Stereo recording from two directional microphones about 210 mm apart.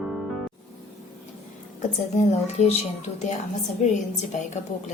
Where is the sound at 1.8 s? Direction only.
35° left (ahead or behind).